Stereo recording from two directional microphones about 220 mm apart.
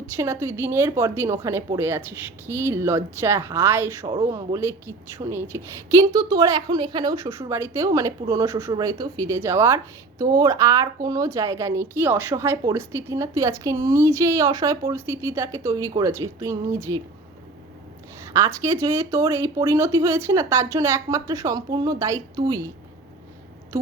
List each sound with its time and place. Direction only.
0.2 s speech: 10° right (ahead or behind)
18.2 s speech: 15° right (ahead or behind)